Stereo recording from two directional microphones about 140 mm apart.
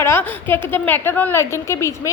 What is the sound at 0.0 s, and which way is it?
A woman's voice, 15° left (ahead or behind).